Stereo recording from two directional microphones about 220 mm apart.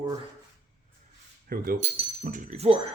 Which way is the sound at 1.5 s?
40° right (ahead or behind).